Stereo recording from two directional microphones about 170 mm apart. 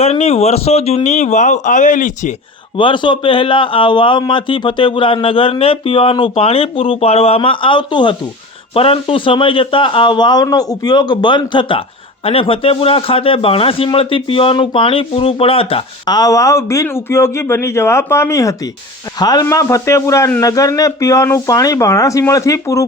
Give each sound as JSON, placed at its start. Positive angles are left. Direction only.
{"t": 0.0, "sound": "speech", "side_deg": 40}
{"t": 2.7, "sound": "a man's voice", "side_deg": 30}